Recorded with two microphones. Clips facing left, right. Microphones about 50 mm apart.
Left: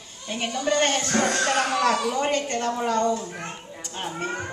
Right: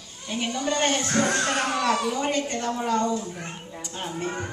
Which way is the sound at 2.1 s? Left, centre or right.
Left.